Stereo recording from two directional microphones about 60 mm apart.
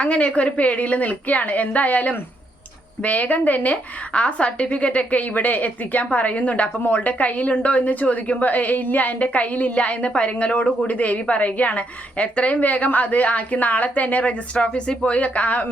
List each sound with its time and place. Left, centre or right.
0.0 s a woman's voice: left